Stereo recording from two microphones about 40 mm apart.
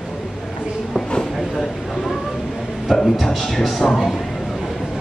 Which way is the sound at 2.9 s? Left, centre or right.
Centre.